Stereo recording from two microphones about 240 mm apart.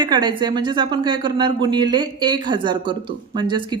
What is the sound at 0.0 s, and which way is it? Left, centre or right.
A woman's voice, centre.